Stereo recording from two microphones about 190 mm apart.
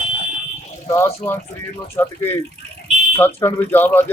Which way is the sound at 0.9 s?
10° left (ahead or behind).